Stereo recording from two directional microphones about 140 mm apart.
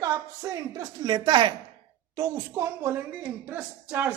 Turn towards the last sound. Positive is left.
turn(degrees=-10)  # may be behind; listen again after turning